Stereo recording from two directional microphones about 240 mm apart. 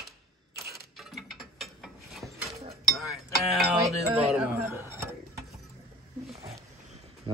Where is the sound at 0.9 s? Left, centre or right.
Centre.